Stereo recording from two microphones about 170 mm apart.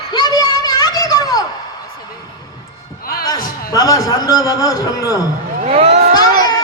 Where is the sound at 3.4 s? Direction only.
55° left (ahead or behind).